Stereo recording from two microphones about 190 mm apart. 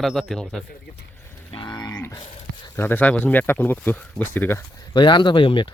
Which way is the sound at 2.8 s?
10° left (ahead or behind).